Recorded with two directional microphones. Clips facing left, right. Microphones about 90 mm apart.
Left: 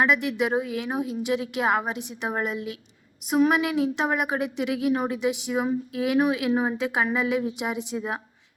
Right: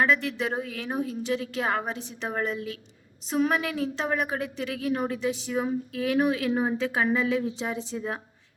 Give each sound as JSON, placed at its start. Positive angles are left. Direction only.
{"t": 0.0, "sound": "a woman's voice", "side_deg": 15}